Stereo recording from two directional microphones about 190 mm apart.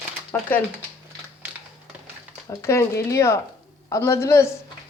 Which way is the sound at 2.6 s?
15° left (ahead or behind).